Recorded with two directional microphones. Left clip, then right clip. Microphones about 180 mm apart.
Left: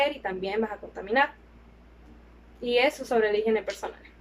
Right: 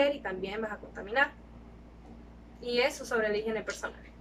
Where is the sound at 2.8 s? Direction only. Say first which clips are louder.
Left 5 dB; 25° left (ahead or behind).